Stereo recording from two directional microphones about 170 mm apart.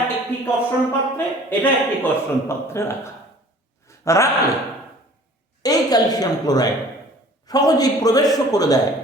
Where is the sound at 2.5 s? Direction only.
15° left (ahead or behind).